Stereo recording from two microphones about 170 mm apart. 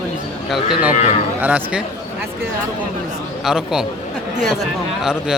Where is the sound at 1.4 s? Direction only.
5° right (ahead or behind).